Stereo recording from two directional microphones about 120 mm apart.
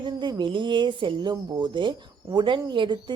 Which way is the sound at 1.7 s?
40° right (ahead or behind).